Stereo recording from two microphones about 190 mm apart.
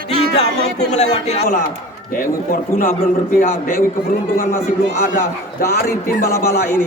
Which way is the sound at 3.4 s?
50° left (ahead or behind).